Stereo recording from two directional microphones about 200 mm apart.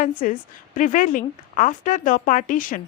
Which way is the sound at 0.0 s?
40° left (ahead or behind).